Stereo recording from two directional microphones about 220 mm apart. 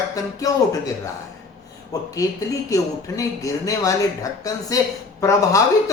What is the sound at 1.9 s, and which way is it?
Speech, 15° left (ahead or behind).